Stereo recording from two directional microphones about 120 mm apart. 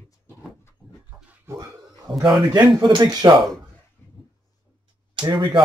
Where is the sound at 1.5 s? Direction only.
25° right (ahead or behind).